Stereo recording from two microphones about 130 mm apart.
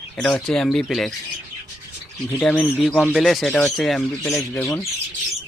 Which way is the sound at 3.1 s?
Centre (ahead or behind).